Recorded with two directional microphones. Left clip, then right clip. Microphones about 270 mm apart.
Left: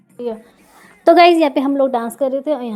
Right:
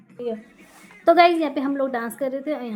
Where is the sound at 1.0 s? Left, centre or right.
Left.